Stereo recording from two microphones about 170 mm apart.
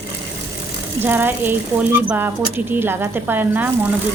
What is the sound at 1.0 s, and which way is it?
Speech, 10° right (ahead or behind).